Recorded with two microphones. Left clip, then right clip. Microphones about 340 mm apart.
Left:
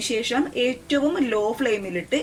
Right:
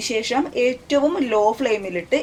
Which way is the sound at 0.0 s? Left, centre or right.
Centre.